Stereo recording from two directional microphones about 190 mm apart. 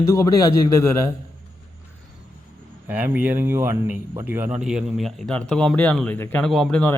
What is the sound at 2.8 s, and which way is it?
Speech, 10° right (ahead or behind).